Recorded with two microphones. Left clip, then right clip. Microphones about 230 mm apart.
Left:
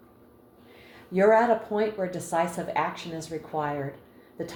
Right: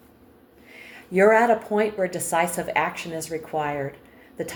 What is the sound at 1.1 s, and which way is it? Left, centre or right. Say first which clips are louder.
Speech: right 3 dB; right.